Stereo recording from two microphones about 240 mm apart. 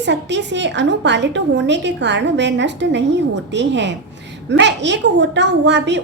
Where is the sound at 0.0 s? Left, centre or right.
Right.